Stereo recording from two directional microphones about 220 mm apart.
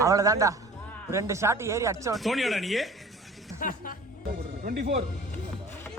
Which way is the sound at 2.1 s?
Centre (ahead or behind).